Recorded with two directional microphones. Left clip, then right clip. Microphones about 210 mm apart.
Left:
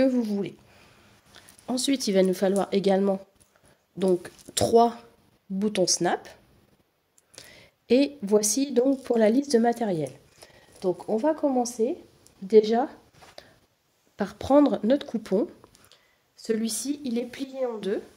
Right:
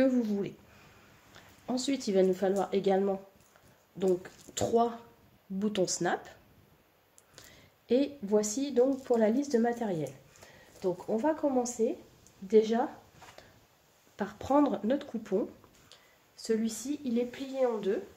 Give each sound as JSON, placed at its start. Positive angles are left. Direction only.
{"t": 0.0, "sound": "speech", "side_deg": 25}
{"t": 1.7, "sound": "a woman's voice", "side_deg": 35}
{"t": 5.6, "sound": "speech", "side_deg": 30}
{"t": 7.3, "sound": "a sound", "side_deg": 40}
{"t": 8.7, "sound": "a woman's voice", "side_deg": 45}
{"t": 10.4, "sound": "a sound", "side_deg": 45}
{"t": 10.8, "sound": "a woman's voice", "side_deg": 45}
{"t": 14.1, "sound": "a woman's voice", "side_deg": 50}
{"t": 15.9, "sound": "a sound", "side_deg": 0}
{"t": 16.5, "sound": "a woman's voice", "side_deg": 50}
{"t": 17.5, "sound": "speech", "side_deg": 0}